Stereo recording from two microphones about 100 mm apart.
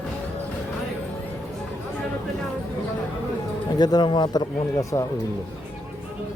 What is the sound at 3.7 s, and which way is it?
Speech, 45° left (ahead or behind).